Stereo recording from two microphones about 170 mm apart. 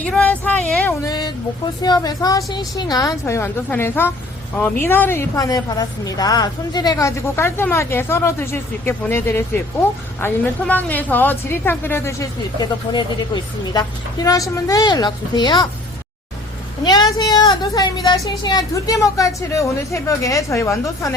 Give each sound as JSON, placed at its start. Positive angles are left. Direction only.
{"t": 0.0, "sound": "speech", "side_deg": 10}
{"t": 1.0, "sound": "a sound", "side_deg": 25}
{"t": 1.8, "sound": "a woman's voice", "side_deg": 25}
{"t": 12.9, "sound": "a woman's voice", "side_deg": 25}
{"t": 16.8, "sound": "a woman's voice", "side_deg": 25}